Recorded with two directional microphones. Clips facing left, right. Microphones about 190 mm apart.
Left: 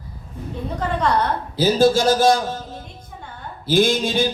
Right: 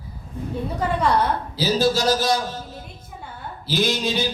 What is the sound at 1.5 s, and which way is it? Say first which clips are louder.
Speech: left 6 dB; 50° left (ahead or behind).